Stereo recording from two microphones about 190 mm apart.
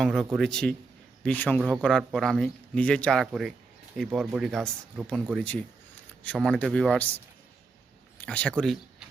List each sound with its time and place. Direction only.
0.0 s speech: centre (ahead or behind)
6.2 s speech: 5° left (ahead or behind)
8.2 s speech: 5° left (ahead or behind)